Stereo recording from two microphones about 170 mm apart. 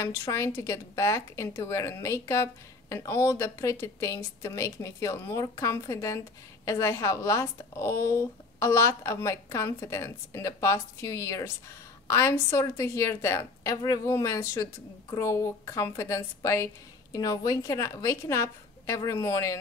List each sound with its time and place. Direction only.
0.0 s a woman's voice: 15° left (ahead or behind)